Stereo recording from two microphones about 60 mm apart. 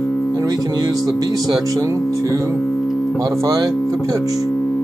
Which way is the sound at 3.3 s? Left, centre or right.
Right.